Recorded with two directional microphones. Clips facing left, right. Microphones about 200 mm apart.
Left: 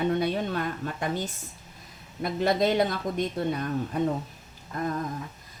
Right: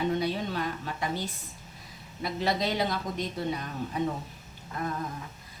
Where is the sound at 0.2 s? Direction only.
50° left (ahead or behind).